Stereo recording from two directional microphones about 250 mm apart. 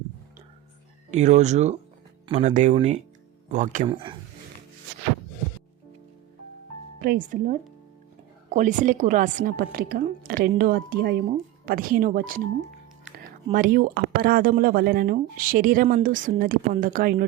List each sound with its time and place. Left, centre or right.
1.1 s speech: right
7.0 s speech: right
13.5 s speech: right